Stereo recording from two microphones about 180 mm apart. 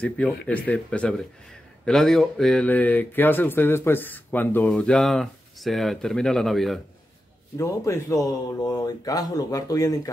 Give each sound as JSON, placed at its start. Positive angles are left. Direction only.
{"t": 0.0, "sound": "speech", "side_deg": 10}
{"t": 7.5, "sound": "speech", "side_deg": 15}